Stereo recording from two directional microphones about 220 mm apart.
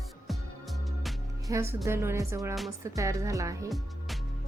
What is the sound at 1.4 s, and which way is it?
A woman's voice, 15° right (ahead or behind).